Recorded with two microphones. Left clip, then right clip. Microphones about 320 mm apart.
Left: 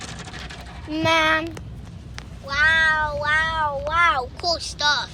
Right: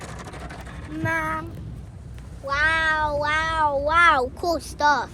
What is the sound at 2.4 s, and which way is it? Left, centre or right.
Meow, right.